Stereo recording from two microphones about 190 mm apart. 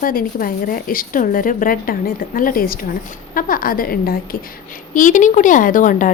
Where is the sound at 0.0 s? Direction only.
50° left (ahead or behind).